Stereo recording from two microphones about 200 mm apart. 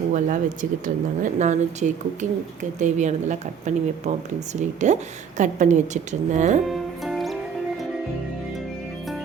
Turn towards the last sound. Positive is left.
turn(degrees=0)  # may be behind; listen again after turning